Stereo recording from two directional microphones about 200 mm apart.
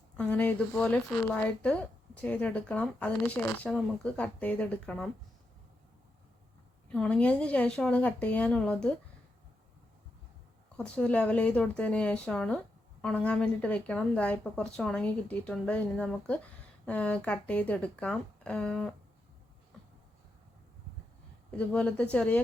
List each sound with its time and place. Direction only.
0.2 s speech: 10° left (ahead or behind)
6.9 s speech: 5° left (ahead or behind)
10.8 s speech: 5° left (ahead or behind)
21.5 s speech: 5° left (ahead or behind)